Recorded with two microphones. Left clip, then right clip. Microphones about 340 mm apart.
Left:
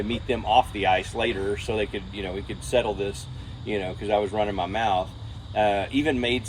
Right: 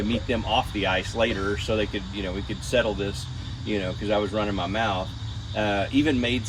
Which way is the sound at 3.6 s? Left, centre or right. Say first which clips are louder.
Even; centre.